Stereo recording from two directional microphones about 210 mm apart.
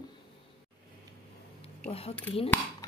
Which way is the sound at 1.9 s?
30° left (ahead or behind).